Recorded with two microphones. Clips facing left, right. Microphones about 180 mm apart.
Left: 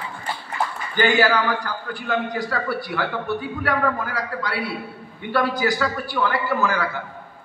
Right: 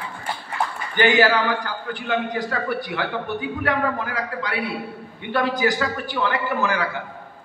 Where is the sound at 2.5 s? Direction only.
20° right (ahead or behind).